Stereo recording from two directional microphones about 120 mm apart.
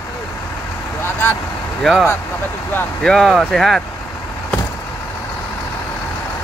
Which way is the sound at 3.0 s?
Centre (ahead or behind).